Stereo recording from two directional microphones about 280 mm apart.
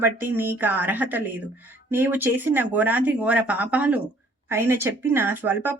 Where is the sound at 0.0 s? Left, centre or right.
Centre.